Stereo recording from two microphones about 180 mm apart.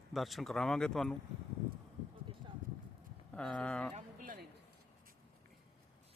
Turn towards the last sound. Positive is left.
turn(degrees=-50)  # may be behind; listen again after turning